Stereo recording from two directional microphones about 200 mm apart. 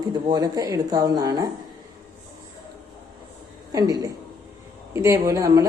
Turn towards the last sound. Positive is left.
turn(degrees=-15)  # may be behind; listen again after turning